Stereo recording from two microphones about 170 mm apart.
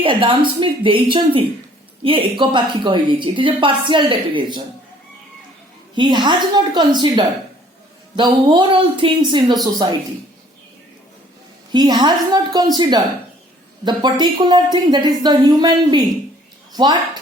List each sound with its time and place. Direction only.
0.0 s a woman's voice: 30° right (ahead or behind)
5.9 s a woman's voice: 25° right (ahead or behind)
8.1 s a woman's voice: 25° right (ahead or behind)
11.7 s a woman's voice: 25° right (ahead or behind)